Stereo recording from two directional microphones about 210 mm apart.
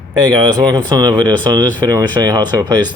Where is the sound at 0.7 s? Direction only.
20° right (ahead or behind).